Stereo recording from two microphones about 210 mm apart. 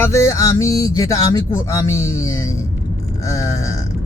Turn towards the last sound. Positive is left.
turn(degrees=15)  # may be behind; listen again after turning